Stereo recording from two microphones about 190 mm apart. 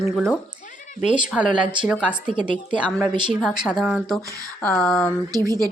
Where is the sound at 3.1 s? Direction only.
25° right (ahead or behind).